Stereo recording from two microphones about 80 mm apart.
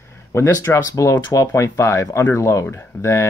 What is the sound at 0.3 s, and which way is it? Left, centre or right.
Speech, left.